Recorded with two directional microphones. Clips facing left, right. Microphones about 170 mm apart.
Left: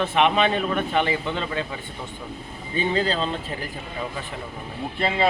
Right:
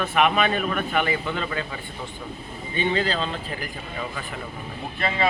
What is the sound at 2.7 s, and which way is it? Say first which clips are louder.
Speech: left 1 dB; 35° left (ahead or behind).